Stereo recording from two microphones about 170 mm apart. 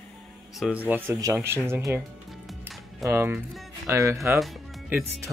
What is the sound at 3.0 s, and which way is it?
Speech, 15° right (ahead or behind).